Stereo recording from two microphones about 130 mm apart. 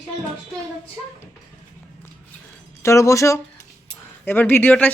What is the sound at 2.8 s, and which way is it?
Speech, 25° left (ahead or behind).